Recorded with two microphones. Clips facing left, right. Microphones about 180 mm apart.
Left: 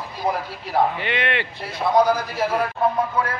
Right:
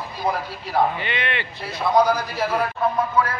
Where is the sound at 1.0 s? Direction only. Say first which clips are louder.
Left 3 dB; 70° left (ahead or behind).